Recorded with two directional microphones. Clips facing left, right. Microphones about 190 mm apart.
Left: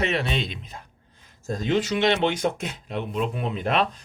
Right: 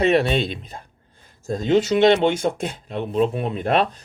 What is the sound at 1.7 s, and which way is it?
Speech, 30° right (ahead or behind).